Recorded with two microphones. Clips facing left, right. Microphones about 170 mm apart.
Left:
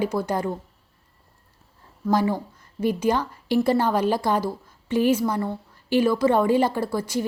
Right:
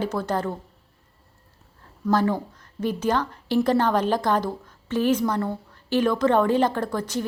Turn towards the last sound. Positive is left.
turn(degrees=10)  # may be behind; listen again after turning